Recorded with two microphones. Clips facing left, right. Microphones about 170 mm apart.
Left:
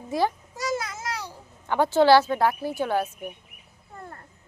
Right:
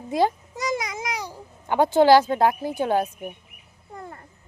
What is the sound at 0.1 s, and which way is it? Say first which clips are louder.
A child's voice: right 3 dB; 20° right (ahead or behind).